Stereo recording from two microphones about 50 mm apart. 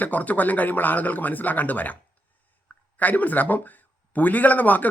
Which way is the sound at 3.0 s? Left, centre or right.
Left.